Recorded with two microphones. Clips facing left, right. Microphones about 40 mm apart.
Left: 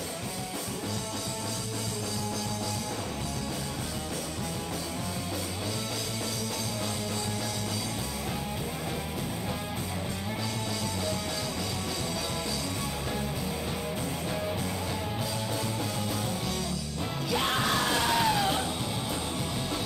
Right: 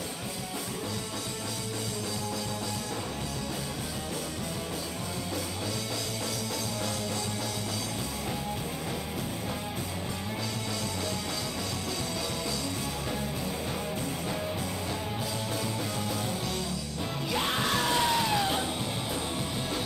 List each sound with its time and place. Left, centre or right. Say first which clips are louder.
17.7 s music: even; centre